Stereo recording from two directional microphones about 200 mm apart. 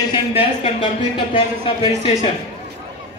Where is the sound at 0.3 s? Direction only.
30° left (ahead or behind).